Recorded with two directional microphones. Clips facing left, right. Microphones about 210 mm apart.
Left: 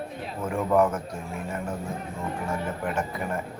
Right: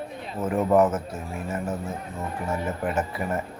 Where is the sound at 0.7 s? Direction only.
5° right (ahead or behind).